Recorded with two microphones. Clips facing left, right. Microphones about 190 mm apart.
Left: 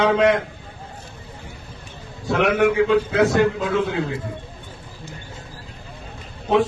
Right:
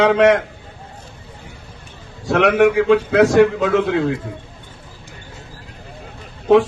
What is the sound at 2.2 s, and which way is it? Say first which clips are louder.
A man's voice: right 4 dB; 75° right (ahead or behind).